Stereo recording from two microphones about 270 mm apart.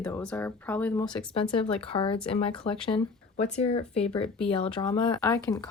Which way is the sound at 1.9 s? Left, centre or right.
Centre.